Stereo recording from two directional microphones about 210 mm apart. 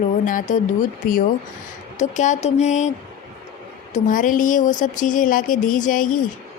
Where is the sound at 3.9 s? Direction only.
40° left (ahead or behind).